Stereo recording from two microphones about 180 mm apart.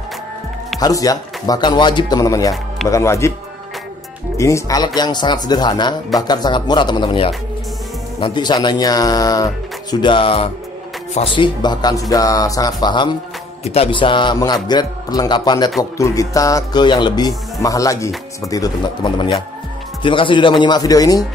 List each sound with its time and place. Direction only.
0.7 s speech: 20° left (ahead or behind)
4.4 s speech: 15° left (ahead or behind)